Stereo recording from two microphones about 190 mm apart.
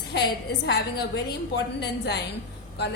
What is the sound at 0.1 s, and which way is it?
A woman's voice, 60° left (ahead or behind).